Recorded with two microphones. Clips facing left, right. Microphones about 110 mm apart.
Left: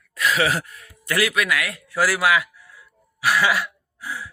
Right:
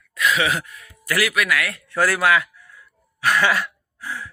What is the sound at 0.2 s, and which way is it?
Speech, 35° left (ahead or behind).